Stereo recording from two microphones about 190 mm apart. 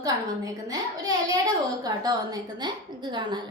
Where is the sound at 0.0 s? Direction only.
20° right (ahead or behind).